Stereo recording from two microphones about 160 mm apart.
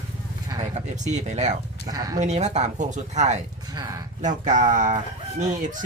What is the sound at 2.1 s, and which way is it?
Speech, 45° right (ahead or behind).